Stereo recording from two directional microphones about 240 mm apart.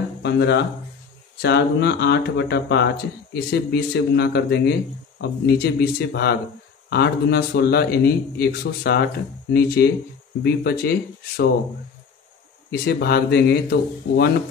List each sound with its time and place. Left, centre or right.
0.2 s a man's voice: left
12.8 s a man's voice: left